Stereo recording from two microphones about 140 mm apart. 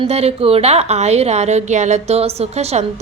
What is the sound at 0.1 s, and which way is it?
A woman's voice, 45° right (ahead or behind).